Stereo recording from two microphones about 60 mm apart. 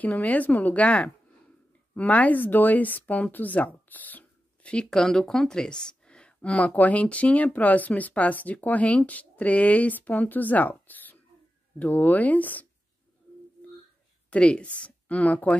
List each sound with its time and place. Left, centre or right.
0.0 s a woman's voice: left
4.8 s a woman's voice: centre; by 12.6 s left
14.3 s speech: centre